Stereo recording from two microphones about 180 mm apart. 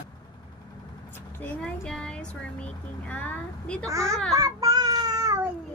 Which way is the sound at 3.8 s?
20° right (ahead or behind).